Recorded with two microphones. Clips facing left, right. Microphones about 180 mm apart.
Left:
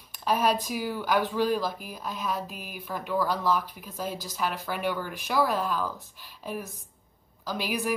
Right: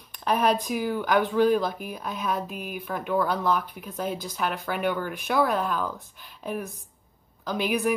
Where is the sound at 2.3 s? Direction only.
55° right (ahead or behind).